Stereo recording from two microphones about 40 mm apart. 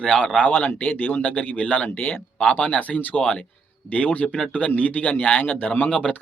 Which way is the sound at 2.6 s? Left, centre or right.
Left.